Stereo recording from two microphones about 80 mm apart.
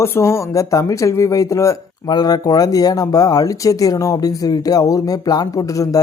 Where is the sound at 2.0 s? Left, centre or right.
Left.